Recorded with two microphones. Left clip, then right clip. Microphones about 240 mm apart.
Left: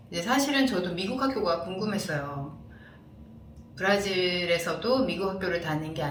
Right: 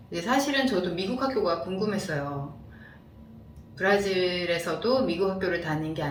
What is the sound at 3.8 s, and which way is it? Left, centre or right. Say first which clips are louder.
A woman's voice: right 2 dB; centre.